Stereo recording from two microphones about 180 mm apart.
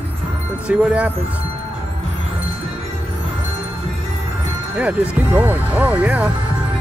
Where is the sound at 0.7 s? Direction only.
5° right (ahead or behind).